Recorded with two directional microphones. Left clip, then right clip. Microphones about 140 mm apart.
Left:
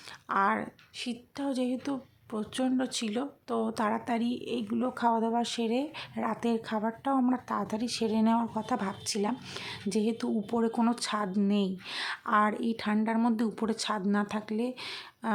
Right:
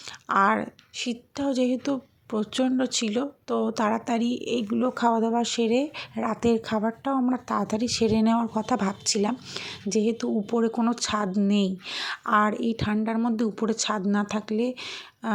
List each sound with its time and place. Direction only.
0.3 s a woman's voice: 35° right (ahead or behind); by 10.8 s 15° right (ahead or behind)
10.8 s a woman's voice: 25° right (ahead or behind)